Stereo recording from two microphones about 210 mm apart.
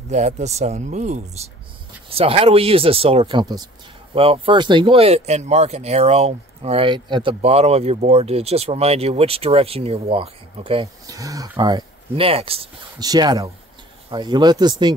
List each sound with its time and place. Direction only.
0.1 s speech: 35° right (ahead or behind)